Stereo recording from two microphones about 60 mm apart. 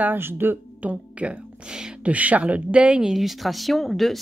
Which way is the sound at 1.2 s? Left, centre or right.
Centre.